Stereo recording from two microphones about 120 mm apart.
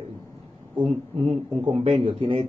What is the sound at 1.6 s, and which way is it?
Speech, 45° right (ahead or behind).